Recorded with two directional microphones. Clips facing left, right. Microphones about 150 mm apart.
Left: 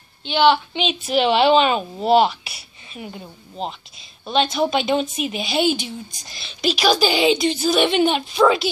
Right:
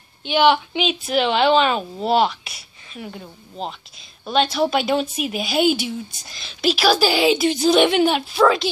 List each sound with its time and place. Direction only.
0.2 s a woman's voice: 10° right (ahead or behind)
7.5 s a woman's voice: 15° right (ahead or behind)
8.0 s a woman's voice: 5° right (ahead or behind)